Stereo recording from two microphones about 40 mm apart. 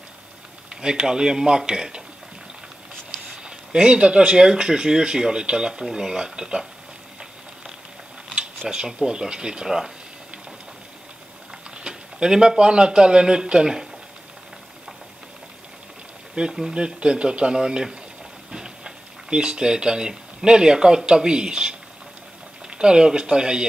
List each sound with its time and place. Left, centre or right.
0.7 s speech: centre
3.1 s speech: centre
8.6 s speech: centre
11.8 s speech: centre
16.4 s speech: centre